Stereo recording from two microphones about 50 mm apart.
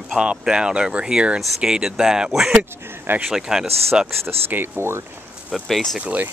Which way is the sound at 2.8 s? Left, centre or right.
Right.